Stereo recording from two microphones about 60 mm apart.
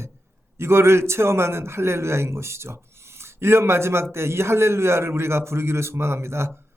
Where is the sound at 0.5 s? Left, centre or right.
Right.